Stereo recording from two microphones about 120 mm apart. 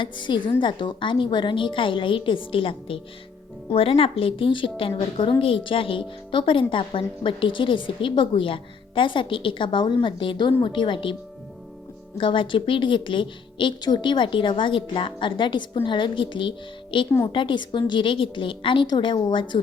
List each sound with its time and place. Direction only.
0.0 s a woman's voice: 40° left (ahead or behind)